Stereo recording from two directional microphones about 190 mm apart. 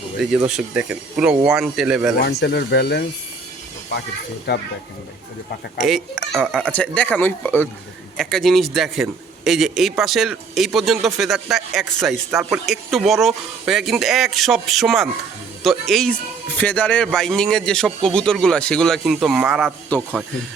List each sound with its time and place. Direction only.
0.2 s speech: 5° right (ahead or behind)
2.2 s speech: 60° left (ahead or behind)
4.5 s speech: 60° left (ahead or behind)
5.8 s speech: centre (ahead or behind)